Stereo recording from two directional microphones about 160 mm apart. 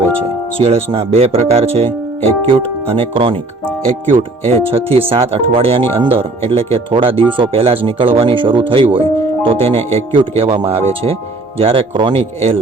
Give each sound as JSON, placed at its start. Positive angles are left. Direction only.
{"t": 0.6, "sound": "speech", "side_deg": -35}